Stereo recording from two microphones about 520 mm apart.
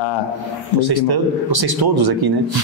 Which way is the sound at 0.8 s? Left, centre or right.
Right.